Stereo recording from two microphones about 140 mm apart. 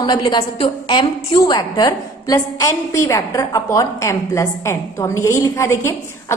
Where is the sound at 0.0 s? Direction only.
30° left (ahead or behind).